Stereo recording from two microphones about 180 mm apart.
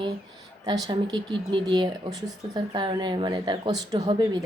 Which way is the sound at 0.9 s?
25° right (ahead or behind).